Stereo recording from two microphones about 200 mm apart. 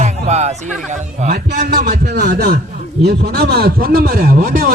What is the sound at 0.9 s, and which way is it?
Speech, 40° right (ahead or behind).